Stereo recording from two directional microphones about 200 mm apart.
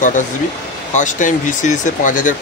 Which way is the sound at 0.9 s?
40° left (ahead or behind).